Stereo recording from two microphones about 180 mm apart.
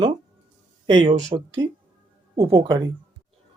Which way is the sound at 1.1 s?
40° right (ahead or behind).